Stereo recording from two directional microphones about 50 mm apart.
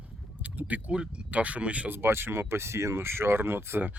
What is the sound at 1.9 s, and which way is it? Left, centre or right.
Speech, right.